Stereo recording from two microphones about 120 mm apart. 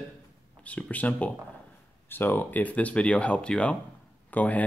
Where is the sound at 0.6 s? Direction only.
10° left (ahead or behind).